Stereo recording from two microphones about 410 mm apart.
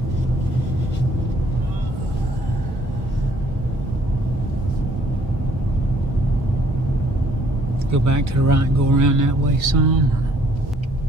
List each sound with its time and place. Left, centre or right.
7.9 s speech: right